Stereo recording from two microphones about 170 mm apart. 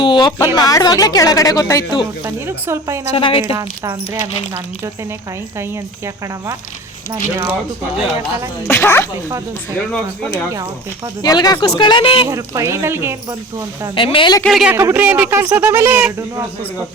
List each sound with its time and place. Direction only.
0.0 s speech: 25° left (ahead or behind)
2.2 s speech: 15° right (ahead or behind)
3.2 s speech: 35° left (ahead or behind)
3.5 s speech: 20° right (ahead or behind)
8.6 s speech: 10° left (ahead or behind)
11.2 s speech: 25° left (ahead or behind)
12.3 s speech: 15° right (ahead or behind)
13.9 s speech: 30° left (ahead or behind)
14.4 s speech: centre (ahead or behind)